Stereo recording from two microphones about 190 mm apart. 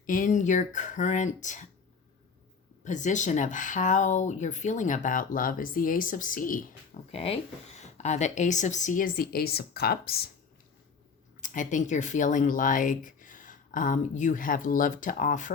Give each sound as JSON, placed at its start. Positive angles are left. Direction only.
{"t": 0.0, "sound": "speech", "side_deg": 45}
{"t": 2.8, "sound": "speech", "side_deg": 40}
{"t": 7.1, "sound": "speech", "side_deg": 30}
{"t": 11.3, "sound": "speech", "side_deg": 40}